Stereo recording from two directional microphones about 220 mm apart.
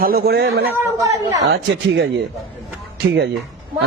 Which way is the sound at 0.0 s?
45° right (ahead or behind).